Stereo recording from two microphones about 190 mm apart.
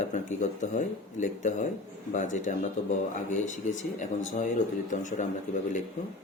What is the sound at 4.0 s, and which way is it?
A man's voice, 40° left (ahead or behind).